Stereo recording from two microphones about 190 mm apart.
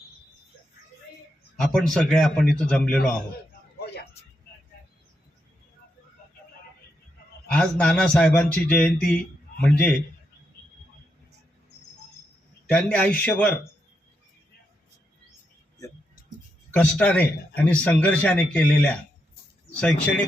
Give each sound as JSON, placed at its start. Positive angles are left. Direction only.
{"t": 1.5, "sound": "a man's voice", "side_deg": 0}
{"t": 3.8, "sound": "a sound", "side_deg": 60}
{"t": 7.5, "sound": "a man's voice", "side_deg": 5}
{"t": 12.6, "sound": "a man's voice", "side_deg": 5}
{"t": 16.7, "sound": "a man's voice", "side_deg": 5}